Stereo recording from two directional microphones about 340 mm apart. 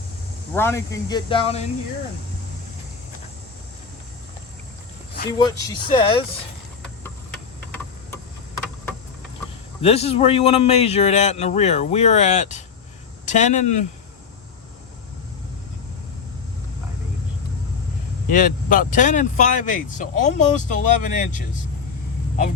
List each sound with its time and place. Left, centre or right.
0.5 s speech: centre
5.4 s speech: centre
9.8 s speech: centre
18.3 s speech: left